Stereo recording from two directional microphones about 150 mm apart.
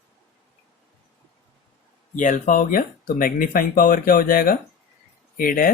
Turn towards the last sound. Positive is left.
turn(degrees=70)  # may be behind; listen again after turning